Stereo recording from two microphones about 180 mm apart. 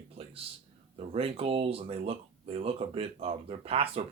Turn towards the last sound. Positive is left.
turn(degrees=-30)  # may be behind; listen again after turning